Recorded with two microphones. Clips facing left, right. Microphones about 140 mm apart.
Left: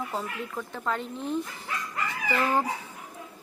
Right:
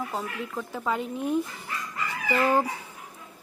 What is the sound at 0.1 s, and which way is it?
Speech, 5° right (ahead or behind).